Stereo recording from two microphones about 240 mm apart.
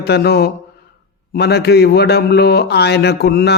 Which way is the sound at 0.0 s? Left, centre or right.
Left.